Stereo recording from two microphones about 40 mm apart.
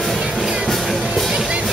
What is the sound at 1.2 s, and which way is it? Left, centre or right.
Music, right.